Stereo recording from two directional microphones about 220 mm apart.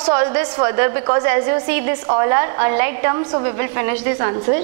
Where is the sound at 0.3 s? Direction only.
20° right (ahead or behind).